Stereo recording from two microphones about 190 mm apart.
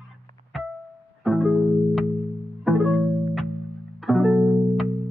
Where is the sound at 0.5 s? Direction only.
Centre (ahead or behind).